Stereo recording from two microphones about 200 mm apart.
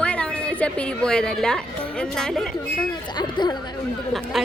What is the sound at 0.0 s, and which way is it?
A woman's voice, 5° left (ahead or behind).